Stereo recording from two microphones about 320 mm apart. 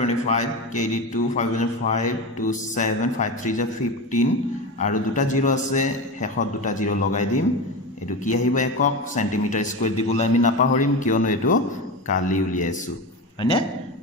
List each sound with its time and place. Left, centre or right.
0.0 s a man's voice: left
4.7 s a man's voice: left